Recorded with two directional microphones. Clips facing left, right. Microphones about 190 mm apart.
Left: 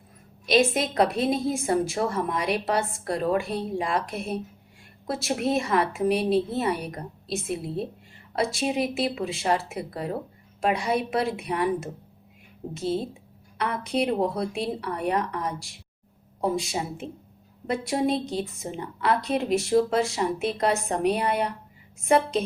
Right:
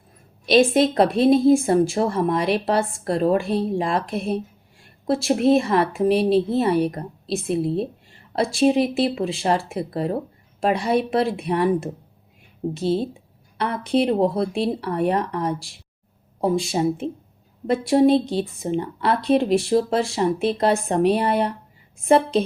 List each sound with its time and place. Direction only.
0.4 s a woman's voice: 30° right (ahead or behind)
13.6 s a woman's voice: 30° right (ahead or behind)